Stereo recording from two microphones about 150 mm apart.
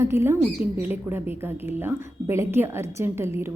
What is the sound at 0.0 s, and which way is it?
A woman's voice, 15° right (ahead or behind).